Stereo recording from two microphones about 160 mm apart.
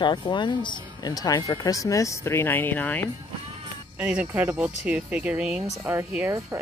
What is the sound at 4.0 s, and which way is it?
Speech, 5° right (ahead or behind).